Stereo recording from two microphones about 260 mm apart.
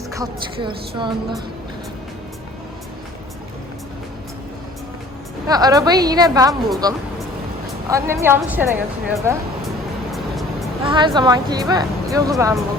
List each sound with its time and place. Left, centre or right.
0.1 s speech: centre
5.5 s speech: centre
6.5 s speech: centre
7.9 s speech: centre
10.1 s music: centre
10.8 s speech: centre